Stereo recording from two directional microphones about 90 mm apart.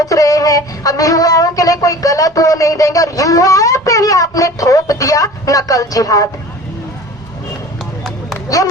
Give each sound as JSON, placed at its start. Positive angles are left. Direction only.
{"t": 0.0, "sound": "music", "side_deg": 40}